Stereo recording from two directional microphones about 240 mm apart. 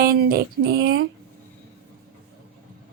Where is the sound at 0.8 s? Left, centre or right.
Right.